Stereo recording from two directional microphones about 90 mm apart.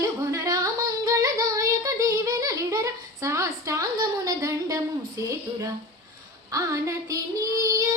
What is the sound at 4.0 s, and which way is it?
Child singing, 40° right (ahead or behind).